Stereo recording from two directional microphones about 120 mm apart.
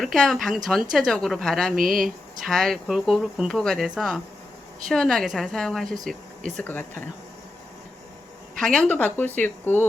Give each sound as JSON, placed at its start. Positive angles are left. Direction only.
{"t": 0.0, "sound": "speech", "side_deg": 0}
{"t": 6.6, "sound": "speech", "side_deg": 15}
{"t": 8.5, "sound": "speech", "side_deg": 5}